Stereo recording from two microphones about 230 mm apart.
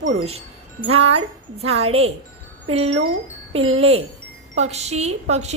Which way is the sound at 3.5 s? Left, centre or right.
Right.